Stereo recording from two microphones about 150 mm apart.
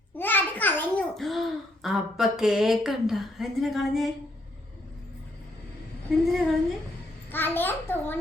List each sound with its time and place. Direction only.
0.2 s a sound: 15° left (ahead or behind)
6.2 s a woman's voice: centre (ahead or behind)
7.3 s a child's voice: 15° left (ahead or behind)